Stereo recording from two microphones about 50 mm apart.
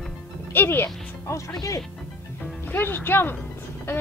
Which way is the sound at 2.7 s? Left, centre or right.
Left.